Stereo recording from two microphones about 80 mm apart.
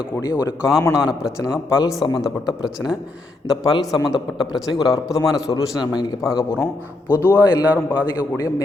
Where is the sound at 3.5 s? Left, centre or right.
Left.